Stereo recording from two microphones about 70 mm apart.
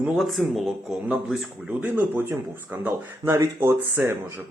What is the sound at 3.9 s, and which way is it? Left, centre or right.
Speech, right.